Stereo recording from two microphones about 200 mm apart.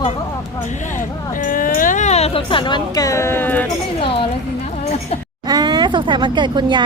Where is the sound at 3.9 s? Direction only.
30° left (ahead or behind).